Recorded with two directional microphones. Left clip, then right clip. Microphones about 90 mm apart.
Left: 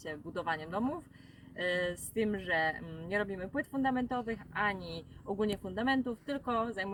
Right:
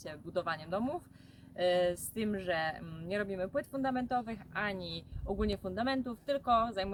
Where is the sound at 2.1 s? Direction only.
25° right (ahead or behind).